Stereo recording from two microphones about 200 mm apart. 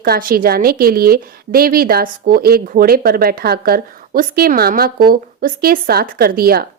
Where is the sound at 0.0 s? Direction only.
45° right (ahead or behind).